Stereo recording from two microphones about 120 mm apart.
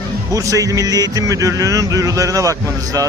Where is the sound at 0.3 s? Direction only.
30° right (ahead or behind).